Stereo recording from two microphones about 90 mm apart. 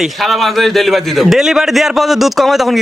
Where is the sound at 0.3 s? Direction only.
Centre (ahead or behind).